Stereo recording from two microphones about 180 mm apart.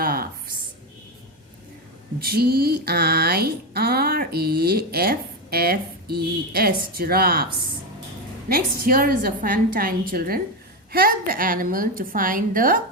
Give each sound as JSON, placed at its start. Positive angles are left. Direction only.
{"t": 0.0, "sound": "a sound", "side_deg": -55}
{"t": 2.2, "sound": "speech", "side_deg": -60}
{"t": 8.4, "sound": "a woman's voice", "side_deg": -55}